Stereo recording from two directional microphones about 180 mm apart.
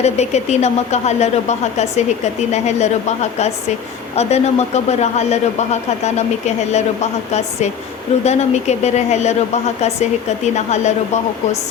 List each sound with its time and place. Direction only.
0.0 s a man's voice: 40° left (ahead or behind)
4.1 s a man's voice: 35° left (ahead or behind)